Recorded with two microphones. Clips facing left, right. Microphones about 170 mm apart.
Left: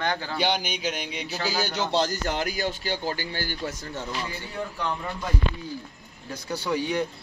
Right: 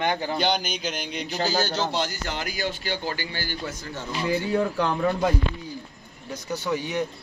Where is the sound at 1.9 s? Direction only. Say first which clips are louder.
Left 3 dB; 35° left (ahead or behind).